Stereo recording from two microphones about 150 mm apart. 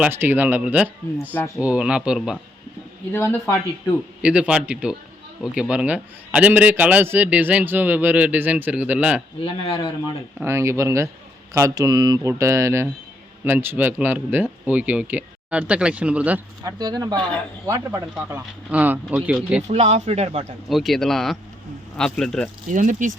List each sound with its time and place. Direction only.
0.0 s a man's voice: 15° right (ahead or behind)
3.1 s speech: 15° left (ahead or behind)
4.2 s a man's voice: 5° right (ahead or behind)
9.4 s a man's voice: 40° left (ahead or behind)
10.4 s a man's voice: 15° right (ahead or behind)
16.6 s a man's voice: 25° right (ahead or behind); by 19.6 s 10° right (ahead or behind)
19.6 s speech: 45° right (ahead or behind)
20.7 s speech: centre (ahead or behind)
22.7 s speech: 55° right (ahead or behind)